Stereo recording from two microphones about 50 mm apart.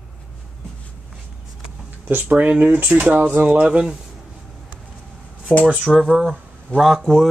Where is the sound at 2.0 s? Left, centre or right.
Right.